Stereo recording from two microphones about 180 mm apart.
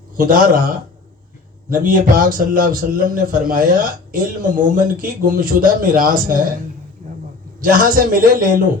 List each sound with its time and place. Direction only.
0.2 s a man's voice: 50° right (ahead or behind)
1.7 s a man's voice: 50° right (ahead or behind)
7.6 s a man's voice: 50° right (ahead or behind)